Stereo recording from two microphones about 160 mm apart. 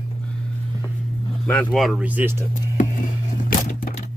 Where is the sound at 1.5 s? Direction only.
5° left (ahead or behind); by 2.3 s 10° right (ahead or behind).